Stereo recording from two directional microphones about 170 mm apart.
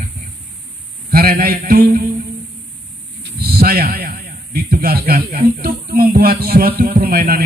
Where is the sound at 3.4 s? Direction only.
65° right (ahead or behind).